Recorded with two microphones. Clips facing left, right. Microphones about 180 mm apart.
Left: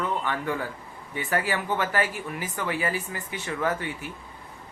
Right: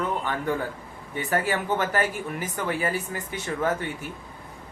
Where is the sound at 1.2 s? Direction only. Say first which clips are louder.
Right 2 dB; 45° right (ahead or behind).